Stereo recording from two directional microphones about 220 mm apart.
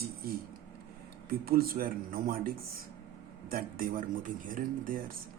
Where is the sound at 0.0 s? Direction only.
45° right (ahead or behind).